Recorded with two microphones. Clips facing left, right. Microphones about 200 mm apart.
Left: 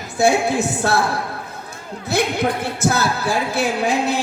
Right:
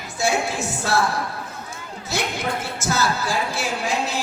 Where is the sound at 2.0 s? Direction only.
60° left (ahead or behind).